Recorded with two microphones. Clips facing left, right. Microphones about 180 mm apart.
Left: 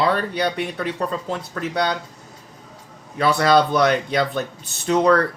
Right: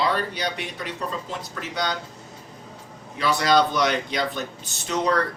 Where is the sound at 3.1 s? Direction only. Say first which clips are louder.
Left 4 dB; 55° left (ahead or behind).